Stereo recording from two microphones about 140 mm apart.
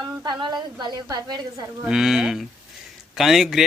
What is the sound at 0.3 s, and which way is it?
A woman's voice, 30° right (ahead or behind).